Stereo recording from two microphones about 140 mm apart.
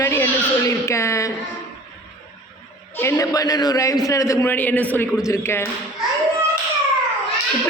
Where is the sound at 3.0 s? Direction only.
20° left (ahead or behind).